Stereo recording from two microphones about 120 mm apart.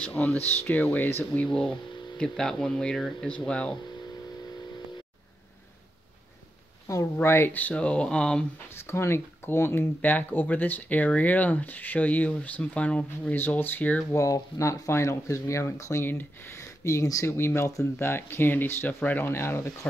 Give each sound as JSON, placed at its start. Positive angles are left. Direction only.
{"t": 0.0, "sound": "speech", "side_deg": 10}
{"t": 7.2, "sound": "speech", "side_deg": 20}
{"t": 8.7, "sound": "speech", "side_deg": 20}
{"t": 14.1, "sound": "speech", "side_deg": 25}